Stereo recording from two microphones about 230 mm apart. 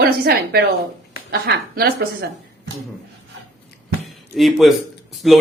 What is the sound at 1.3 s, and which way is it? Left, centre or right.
Speech, right.